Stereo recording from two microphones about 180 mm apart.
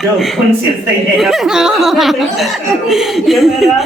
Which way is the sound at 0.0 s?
Centre (ahead or behind).